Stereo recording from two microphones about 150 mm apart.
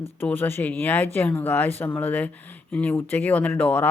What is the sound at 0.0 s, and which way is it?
Speech, 15° left (ahead or behind).